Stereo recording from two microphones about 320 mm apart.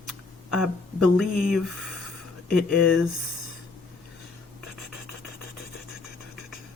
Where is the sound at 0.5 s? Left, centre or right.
Centre.